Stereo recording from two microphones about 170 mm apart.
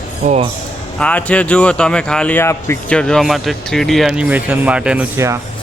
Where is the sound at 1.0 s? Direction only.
5° left (ahead or behind).